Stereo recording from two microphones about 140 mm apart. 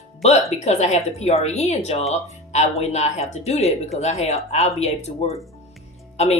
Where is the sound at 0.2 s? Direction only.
50° left (ahead or behind).